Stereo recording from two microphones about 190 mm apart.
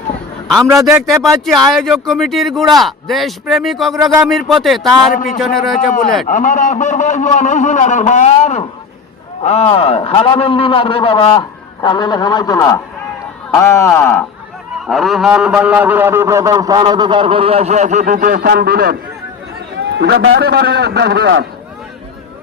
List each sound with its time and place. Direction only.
0.5 s a man's voice: 15° right (ahead or behind)
1.0 s speech: centre (ahead or behind)
3.9 s a man's voice: 20° right (ahead or behind)
4.3 s speech: centre (ahead or behind)
6.2 s a man's voice: 40° left (ahead or behind); by 14.3 s 10° left (ahead or behind)
14.8 s a man's voice: centre (ahead or behind); by 18.9 s 55° right (ahead or behind)
20.0 s a man's voice: 60° right (ahead or behind); by 20.4 s 75° right (ahead or behind)
20.4 s a man's voice: 55° right (ahead or behind)